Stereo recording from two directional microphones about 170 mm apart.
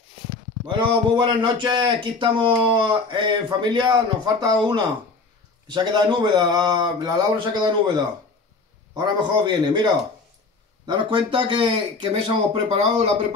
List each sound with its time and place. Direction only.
0.7 s speech: 30° right (ahead or behind)
10.9 s speech: 25° right (ahead or behind)